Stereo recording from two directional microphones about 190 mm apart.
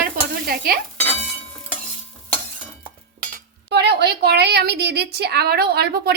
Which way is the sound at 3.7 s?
60° right (ahead or behind).